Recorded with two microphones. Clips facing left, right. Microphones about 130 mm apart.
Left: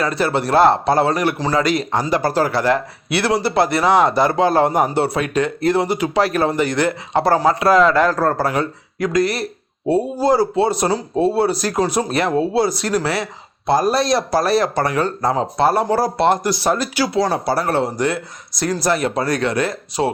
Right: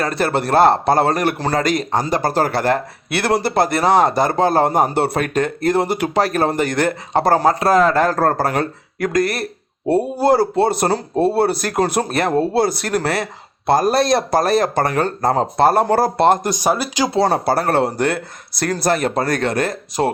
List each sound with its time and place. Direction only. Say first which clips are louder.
0.0 s a man's voice: even; 50° right (ahead or behind)
16.5 s speech: even; 10° right (ahead or behind)
17.2 s a man's voice: right 2 dB; 55° right (ahead or behind)